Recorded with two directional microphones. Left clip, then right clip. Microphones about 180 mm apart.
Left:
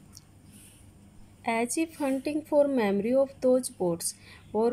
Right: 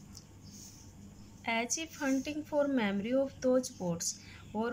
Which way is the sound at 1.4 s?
25° left (ahead or behind).